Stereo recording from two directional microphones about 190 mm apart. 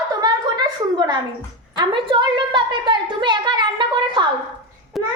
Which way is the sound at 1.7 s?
25° right (ahead or behind).